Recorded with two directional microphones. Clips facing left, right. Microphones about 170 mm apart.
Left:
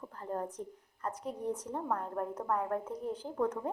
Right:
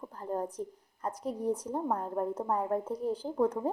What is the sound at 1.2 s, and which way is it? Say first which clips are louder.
Speech: right 6 dB; 35° right (ahead or behind).